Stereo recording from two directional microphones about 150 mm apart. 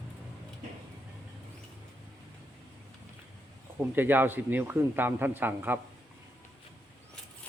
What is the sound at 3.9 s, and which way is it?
A man's voice, 15° right (ahead or behind).